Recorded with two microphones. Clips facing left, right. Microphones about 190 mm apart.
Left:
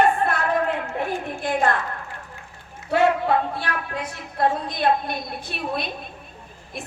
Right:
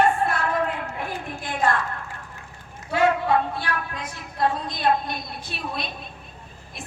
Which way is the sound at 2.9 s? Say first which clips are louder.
Left 1 dB; 60° left (ahead or behind).